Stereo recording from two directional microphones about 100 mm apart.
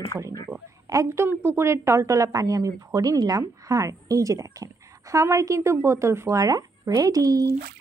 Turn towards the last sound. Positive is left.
turn(degrees=-35)  # may be behind; listen again after turning